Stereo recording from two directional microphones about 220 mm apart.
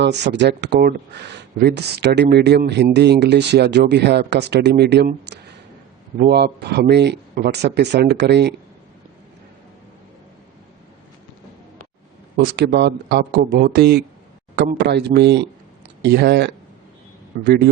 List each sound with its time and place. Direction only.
0.0 s speech: 50° right (ahead or behind)
12.5 s speech: 50° right (ahead or behind)